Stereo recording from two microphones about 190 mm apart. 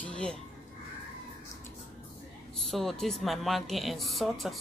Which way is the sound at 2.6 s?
Centre (ahead or behind).